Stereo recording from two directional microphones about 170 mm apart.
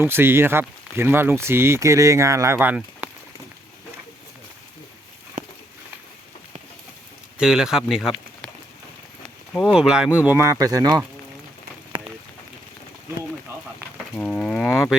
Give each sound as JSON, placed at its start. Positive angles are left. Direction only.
{"t": 0.0, "sound": "speech", "side_deg": -15}
{"t": 5.4, "sound": "walk", "side_deg": -55}
{"t": 7.3, "sound": "speech", "side_deg": -5}
{"t": 9.5, "sound": "speech", "side_deg": 0}
{"t": 11.9, "sound": "run", "side_deg": -30}
{"t": 14.2, "sound": "speech", "side_deg": 5}